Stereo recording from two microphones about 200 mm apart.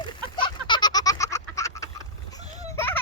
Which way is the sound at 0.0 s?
25° left (ahead or behind).